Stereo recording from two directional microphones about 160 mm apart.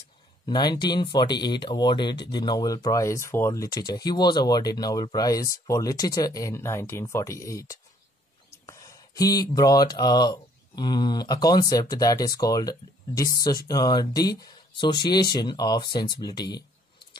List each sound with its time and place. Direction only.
0.5 s speech: 25° left (ahead or behind)